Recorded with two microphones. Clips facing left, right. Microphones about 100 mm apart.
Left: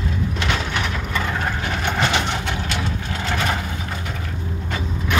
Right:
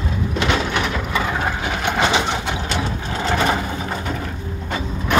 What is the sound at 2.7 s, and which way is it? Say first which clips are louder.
Vehicle: right 2 dB; 30° right (ahead or behind).